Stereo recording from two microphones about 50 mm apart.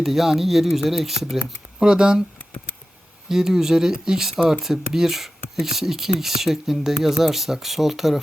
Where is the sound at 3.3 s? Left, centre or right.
Centre.